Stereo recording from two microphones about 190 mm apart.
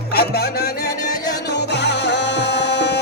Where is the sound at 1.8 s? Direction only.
65° left (ahead or behind).